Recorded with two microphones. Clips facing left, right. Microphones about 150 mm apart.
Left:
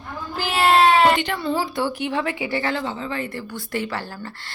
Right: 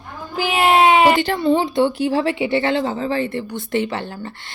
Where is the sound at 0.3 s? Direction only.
15° right (ahead or behind).